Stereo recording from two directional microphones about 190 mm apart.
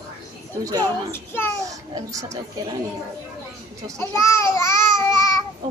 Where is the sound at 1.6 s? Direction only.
15° right (ahead or behind).